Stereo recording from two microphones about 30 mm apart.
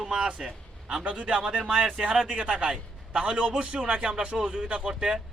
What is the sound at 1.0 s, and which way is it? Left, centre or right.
Speech, right.